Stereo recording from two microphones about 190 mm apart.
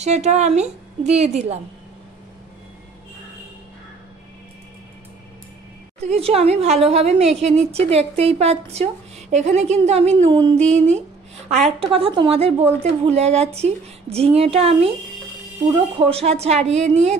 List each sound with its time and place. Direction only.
0.0 s a woman's voice: 35° right (ahead or behind)
5.9 s a woman's voice: 35° right (ahead or behind)
16.1 s a woman's voice: 35° right (ahead or behind)